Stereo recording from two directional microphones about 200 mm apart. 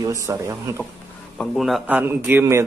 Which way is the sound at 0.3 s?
15° right (ahead or behind).